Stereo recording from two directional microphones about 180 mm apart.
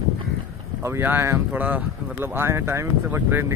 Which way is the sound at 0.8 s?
15° right (ahead or behind).